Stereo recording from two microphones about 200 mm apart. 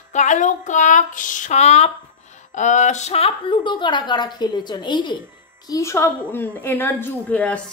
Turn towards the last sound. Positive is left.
turn(degrees=5)  # may be behind; listen again after turning